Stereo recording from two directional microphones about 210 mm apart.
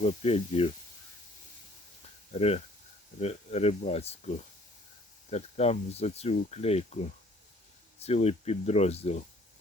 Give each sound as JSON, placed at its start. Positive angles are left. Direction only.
{"t": 0.0, "sound": "speech", "side_deg": 30}
{"t": 2.3, "sound": "speech", "side_deg": 30}